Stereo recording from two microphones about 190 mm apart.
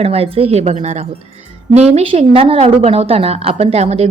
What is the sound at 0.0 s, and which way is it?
A woman's voice, 30° right (ahead or behind).